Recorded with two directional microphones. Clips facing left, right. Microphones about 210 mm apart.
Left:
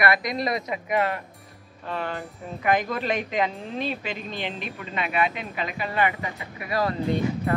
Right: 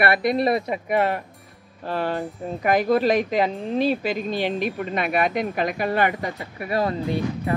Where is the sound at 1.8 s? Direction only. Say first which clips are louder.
Right 6 dB; 35° right (ahead or behind).